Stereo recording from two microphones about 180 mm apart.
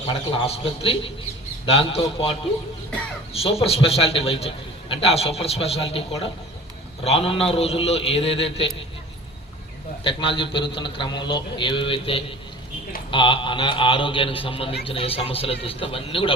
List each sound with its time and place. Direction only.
0.1 s a man's voice: 30° left (ahead or behind)
3.3 s a man's voice: 30° left (ahead or behind)
10.0 s a man's voice: 30° left (ahead or behind)